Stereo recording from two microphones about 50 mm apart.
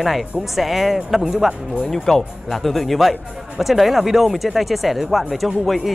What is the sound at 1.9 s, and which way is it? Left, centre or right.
Speech, centre.